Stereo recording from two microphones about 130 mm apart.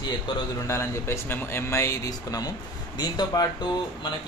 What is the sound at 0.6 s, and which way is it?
Speech, 20° left (ahead or behind).